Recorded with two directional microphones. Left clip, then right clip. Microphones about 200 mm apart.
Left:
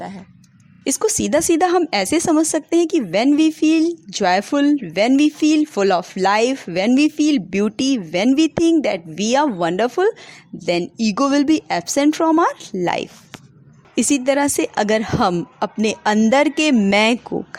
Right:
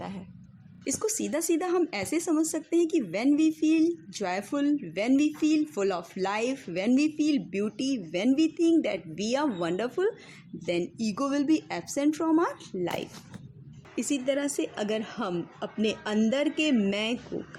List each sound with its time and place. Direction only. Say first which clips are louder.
0.9 s a woman's voice: left 12 dB; 45° left (ahead or behind)